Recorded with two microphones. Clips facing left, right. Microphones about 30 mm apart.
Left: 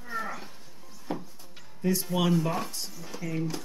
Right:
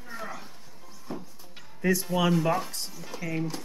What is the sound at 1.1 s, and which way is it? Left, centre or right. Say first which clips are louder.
Music: left 3 dB; left.